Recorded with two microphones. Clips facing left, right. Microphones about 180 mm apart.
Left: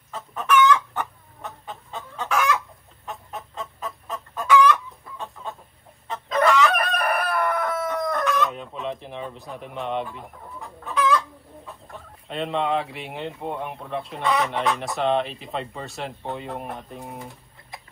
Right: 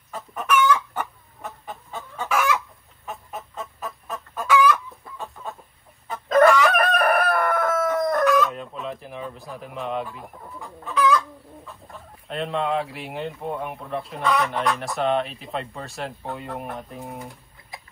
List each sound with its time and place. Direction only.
0.1 s chicken: 10° right (ahead or behind)
6.2 s crowing: 50° right (ahead or behind)
8.3 s chicken: centre (ahead or behind)
12.3 s speech: centre (ahead or behind)